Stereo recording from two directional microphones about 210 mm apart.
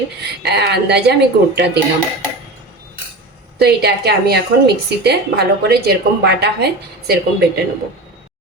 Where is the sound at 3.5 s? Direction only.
50° right (ahead or behind).